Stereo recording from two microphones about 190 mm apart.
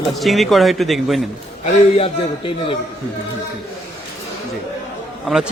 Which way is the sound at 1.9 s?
30° left (ahead or behind).